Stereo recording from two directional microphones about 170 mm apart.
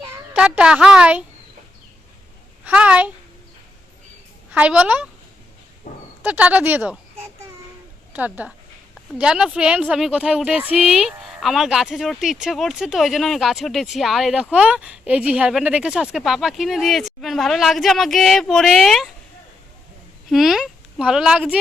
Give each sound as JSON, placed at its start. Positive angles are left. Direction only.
{"t": 0.3, "sound": "speech", "side_deg": -5}
{"t": 2.6, "sound": "a woman's voice", "side_deg": -5}
{"t": 4.5, "sound": "speech", "side_deg": -5}
{"t": 5.9, "sound": "a sound", "side_deg": 45}
{"t": 6.2, "sound": "speech", "side_deg": -10}
{"t": 8.1, "sound": "speech", "side_deg": -10}
{"t": 20.3, "sound": "speech", "side_deg": 0}